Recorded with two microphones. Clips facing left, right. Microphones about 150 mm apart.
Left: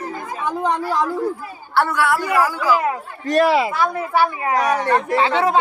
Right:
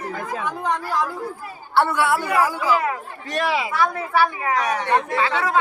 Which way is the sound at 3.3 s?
35° left (ahead or behind).